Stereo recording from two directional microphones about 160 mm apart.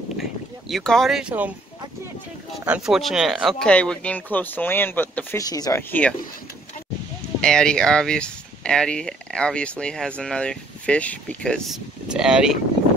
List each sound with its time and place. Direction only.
0.2 s boat: centre (ahead or behind)
2.6 s speech: 5° right (ahead or behind); by 5.4 s 10° left (ahead or behind)
5.4 s speech: 25° left (ahead or behind)
5.8 s speech: 10° left (ahead or behind)
7.3 s speech: 5° left (ahead or behind)